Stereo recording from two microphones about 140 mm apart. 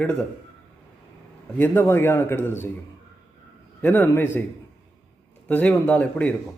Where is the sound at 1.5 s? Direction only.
15° left (ahead or behind).